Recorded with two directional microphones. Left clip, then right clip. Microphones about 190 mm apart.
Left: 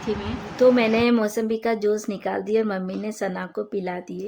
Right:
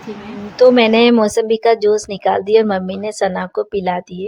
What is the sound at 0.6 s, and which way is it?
A woman's voice, 45° right (ahead or behind).